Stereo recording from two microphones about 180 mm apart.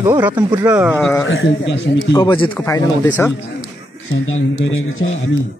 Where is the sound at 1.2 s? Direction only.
85° left.